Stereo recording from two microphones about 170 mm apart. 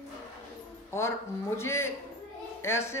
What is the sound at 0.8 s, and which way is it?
Speech, 15° left (ahead or behind).